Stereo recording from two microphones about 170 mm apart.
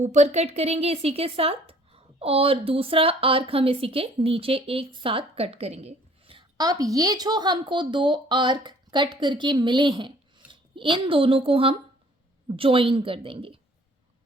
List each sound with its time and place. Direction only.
0.0 s speech: 45° right (ahead or behind)